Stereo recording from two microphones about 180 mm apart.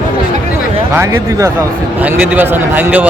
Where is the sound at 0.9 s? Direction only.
15° right (ahead or behind).